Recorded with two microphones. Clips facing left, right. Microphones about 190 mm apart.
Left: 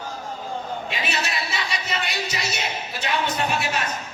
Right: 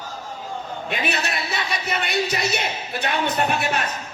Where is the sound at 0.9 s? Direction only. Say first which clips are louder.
Right 5 dB; 55° right (ahead or behind).